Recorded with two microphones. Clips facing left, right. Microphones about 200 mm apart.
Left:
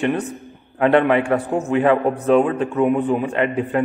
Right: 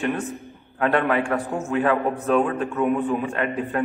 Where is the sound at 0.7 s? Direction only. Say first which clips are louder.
Left 6 dB; 20° left (ahead or behind).